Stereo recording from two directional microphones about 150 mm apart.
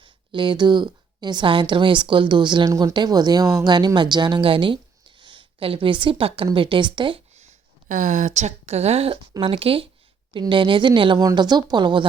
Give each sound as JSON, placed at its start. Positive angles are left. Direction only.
{"t": 0.0, "sound": "a woman's voice", "side_deg": -30}
{"t": 7.9, "sound": "a woman's voice", "side_deg": -55}